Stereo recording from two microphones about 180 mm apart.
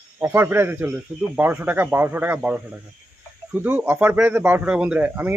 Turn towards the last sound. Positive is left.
turn(degrees=-10)  # may be behind; listen again after turning